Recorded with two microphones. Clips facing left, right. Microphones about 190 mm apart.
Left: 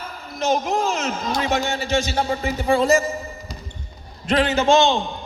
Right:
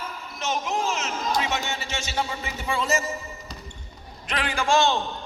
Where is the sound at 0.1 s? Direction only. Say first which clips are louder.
Left 10 dB; 35° left (ahead or behind).